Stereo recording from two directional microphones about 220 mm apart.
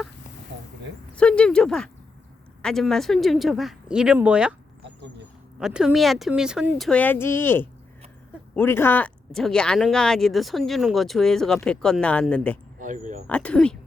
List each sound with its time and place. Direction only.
1.1 s speech: 5° left (ahead or behind)
5.5 s speech: 5° right (ahead or behind)
12.8 s speech: 35° right (ahead or behind)
13.2 s speech: 5° left (ahead or behind)